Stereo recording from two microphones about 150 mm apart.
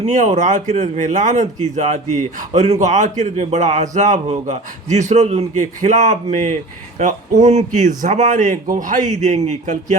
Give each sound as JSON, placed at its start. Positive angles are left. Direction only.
{"t": 0.0, "sound": "a man's voice", "side_deg": -55}